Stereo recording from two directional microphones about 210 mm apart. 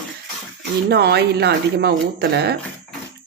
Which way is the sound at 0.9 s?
50° right (ahead or behind).